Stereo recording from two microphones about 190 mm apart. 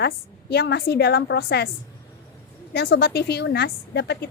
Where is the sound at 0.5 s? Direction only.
55° left (ahead or behind).